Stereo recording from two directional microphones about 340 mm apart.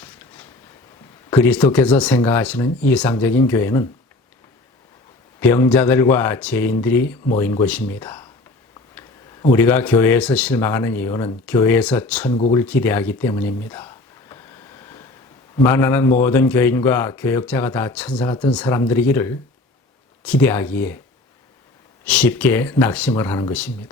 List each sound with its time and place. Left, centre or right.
0.0 s a sound: centre
1.3 s speech: centre
5.4 s speech: centre
9.5 s speech: centre
12.5 s a sound: centre
15.6 s a man's voice: centre
22.0 s speech: centre